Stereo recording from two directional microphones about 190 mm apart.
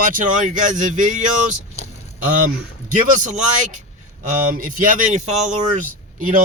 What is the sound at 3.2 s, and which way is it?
Speech, 40° right (ahead or behind).